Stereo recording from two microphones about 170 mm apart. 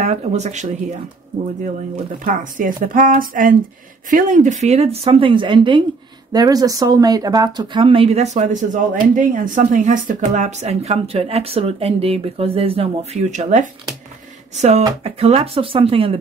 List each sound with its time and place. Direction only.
0.0 s speech: 40° right (ahead or behind)
2.2 s speech: 50° right (ahead or behind); by 16.2 s 35° right (ahead or behind)